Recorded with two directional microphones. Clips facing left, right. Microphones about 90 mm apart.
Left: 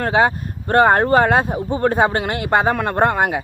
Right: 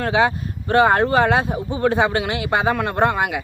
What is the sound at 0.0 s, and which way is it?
Speech, 45° left (ahead or behind).